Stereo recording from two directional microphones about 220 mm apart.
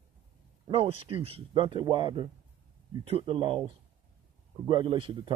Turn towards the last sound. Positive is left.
turn(degrees=-25)  # may be behind; listen again after turning